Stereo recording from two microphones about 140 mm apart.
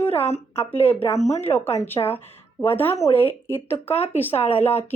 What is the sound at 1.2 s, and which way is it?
Speech, 50° left (ahead or behind).